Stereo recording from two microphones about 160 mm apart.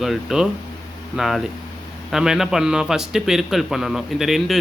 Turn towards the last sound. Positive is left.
turn(degrees=0)  # may be behind; listen again after turning